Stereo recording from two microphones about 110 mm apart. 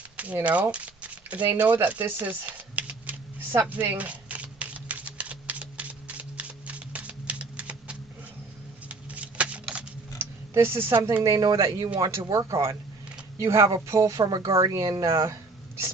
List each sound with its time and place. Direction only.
0.2 s speech: 15° right (ahead or behind)
0.7 s a sound: 15° right (ahead or behind)
10.2 s speech: 25° right (ahead or behind)
11.2 s speech: 35° right (ahead or behind)